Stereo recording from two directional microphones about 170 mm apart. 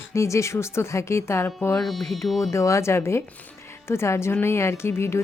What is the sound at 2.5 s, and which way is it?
A woman's voice, 15° left (ahead or behind).